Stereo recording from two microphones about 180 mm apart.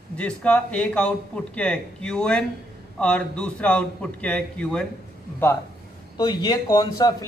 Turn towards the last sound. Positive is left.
turn(degrees=20)  # may be behind; listen again after turning